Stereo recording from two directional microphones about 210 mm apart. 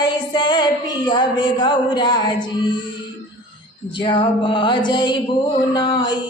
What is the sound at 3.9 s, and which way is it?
Music, 20° left (ahead or behind).